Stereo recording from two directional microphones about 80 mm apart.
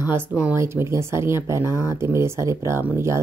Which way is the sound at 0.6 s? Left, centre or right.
Right.